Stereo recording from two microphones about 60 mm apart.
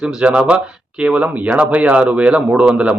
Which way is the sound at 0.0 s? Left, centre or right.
Centre.